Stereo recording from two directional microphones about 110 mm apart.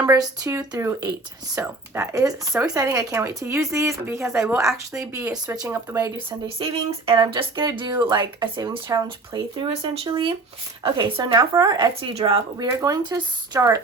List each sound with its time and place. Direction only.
0.0 s speech: 30° right (ahead or behind)
6.6 s speech: 50° right (ahead or behind)
9.9 s speech: 60° right (ahead or behind)
10.8 s speech: 40° right (ahead or behind)
12.1 s speech: 55° right (ahead or behind)
12.5 s speech: 35° right (ahead or behind)